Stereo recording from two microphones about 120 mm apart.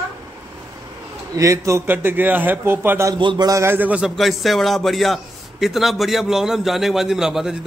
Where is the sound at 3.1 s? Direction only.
40° right (ahead or behind).